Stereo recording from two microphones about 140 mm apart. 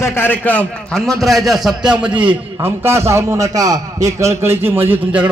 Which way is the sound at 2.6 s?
20° right (ahead or behind).